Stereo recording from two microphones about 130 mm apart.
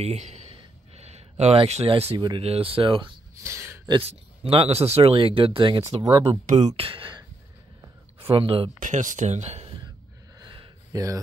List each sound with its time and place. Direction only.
0.0 s a sound: 55° right (ahead or behind)
1.4 s speech: 55° right (ahead or behind)
2.1 s speech: 35° right (ahead or behind)
2.4 s speech: 45° right (ahead or behind)
3.4 s a sound: 20° right (ahead or behind)
4.0 s speech: 50° right (ahead or behind)
6.4 s speech: 60° right (ahead or behind)
6.8 s speech: 45° right (ahead or behind)
8.7 s speech: 85° right; by 9.7 s 55° right (ahead or behind)
10.4 s a sound: 40° right (ahead or behind)
10.9 s speech: 25° right (ahead or behind)